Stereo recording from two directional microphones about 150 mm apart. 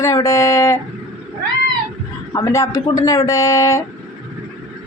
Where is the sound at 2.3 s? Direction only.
20° left (ahead or behind).